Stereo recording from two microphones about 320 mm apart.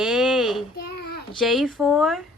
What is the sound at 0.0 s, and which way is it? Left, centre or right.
Child singing, centre.